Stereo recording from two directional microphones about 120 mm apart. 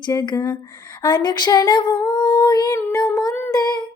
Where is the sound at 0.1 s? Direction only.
35° left (ahead or behind).